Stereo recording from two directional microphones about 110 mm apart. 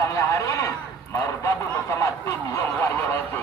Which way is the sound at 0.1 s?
30° left (ahead or behind).